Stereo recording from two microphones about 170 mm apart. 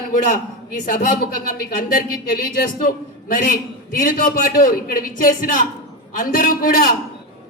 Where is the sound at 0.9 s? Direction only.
55° left (ahead or behind).